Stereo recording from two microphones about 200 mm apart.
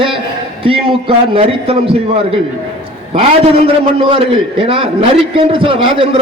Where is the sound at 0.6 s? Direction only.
25° right (ahead or behind).